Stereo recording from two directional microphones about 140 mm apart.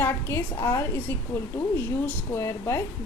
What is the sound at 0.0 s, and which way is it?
A woman's voice, 15° left (ahead or behind).